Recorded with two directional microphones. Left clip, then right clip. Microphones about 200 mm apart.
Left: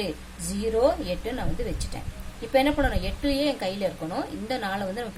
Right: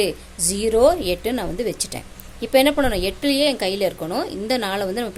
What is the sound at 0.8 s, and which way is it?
Speech, 55° right (ahead or behind).